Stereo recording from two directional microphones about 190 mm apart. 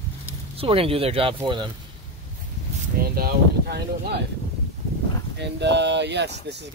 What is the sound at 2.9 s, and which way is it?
Speech, 55° right (ahead or behind).